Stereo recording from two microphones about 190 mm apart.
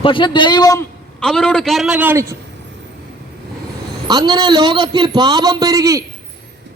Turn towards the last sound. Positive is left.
turn(degrees=-20)  # may be behind; listen again after turning